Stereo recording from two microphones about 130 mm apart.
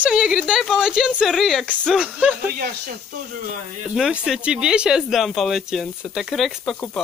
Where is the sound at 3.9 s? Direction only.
5° right (ahead or behind).